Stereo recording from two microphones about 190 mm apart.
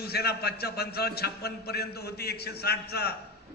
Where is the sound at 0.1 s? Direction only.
55° left (ahead or behind).